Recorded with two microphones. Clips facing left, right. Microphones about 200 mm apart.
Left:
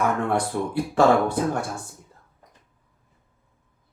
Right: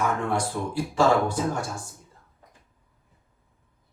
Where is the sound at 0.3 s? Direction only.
60° left (ahead or behind).